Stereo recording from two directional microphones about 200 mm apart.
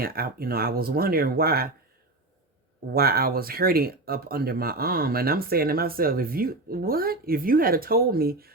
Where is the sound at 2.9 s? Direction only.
50° right (ahead or behind).